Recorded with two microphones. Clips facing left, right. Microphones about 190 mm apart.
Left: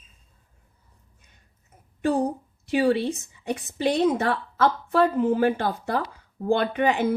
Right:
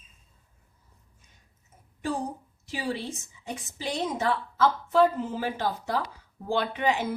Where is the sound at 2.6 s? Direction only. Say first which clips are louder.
Left 11 dB; 60° left (ahead or behind).